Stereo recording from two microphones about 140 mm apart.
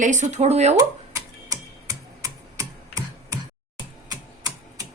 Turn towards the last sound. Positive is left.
turn(degrees=-25)  # may be behind; listen again after turning